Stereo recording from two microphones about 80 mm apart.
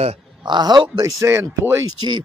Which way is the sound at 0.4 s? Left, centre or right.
Right.